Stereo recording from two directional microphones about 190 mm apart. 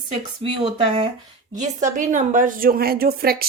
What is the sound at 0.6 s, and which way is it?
A woman's voice, 30° right (ahead or behind).